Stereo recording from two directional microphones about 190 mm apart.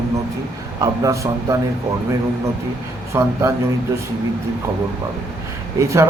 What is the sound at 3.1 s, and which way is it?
Speech, 15° right (ahead or behind).